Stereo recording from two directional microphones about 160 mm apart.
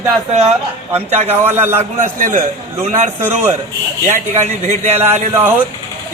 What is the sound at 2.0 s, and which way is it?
A man's voice, 55° right (ahead or behind).